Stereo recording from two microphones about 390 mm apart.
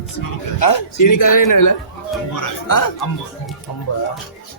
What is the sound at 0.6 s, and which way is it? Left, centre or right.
Speech, left.